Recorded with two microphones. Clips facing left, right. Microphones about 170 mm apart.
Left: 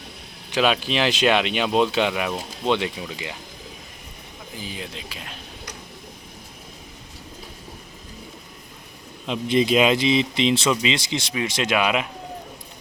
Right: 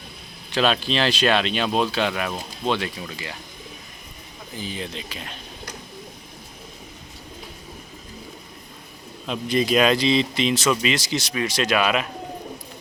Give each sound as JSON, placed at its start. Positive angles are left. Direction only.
{"t": 0.5, "sound": "speech", "side_deg": 10}
{"t": 4.5, "sound": "speech", "side_deg": 5}
{"t": 9.2, "sound": "speech", "side_deg": 20}